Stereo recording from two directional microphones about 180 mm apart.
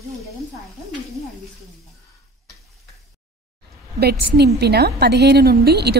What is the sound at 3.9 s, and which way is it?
A woman's voice, 65° right (ahead or behind).